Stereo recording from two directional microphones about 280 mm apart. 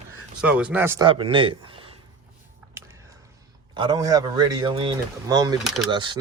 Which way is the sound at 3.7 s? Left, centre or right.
Centre.